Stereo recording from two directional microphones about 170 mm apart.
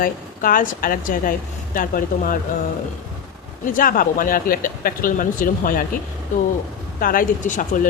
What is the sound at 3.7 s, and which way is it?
A woman's voice, 55° left (ahead or behind).